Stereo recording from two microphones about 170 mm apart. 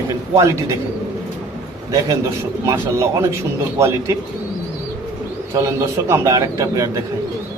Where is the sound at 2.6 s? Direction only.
15° right (ahead or behind).